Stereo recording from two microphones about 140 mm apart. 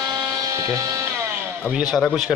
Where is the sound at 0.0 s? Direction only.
30° right (ahead or behind).